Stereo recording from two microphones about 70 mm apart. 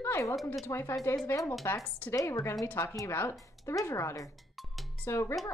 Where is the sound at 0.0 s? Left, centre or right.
Left.